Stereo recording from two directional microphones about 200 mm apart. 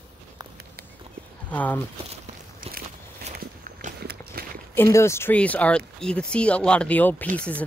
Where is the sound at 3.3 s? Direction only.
45° right (ahead or behind).